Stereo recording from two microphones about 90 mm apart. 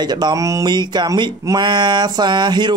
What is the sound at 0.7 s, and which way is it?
Speech, 55° right (ahead or behind).